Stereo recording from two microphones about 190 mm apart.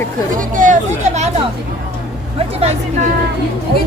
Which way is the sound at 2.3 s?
35° right (ahead or behind).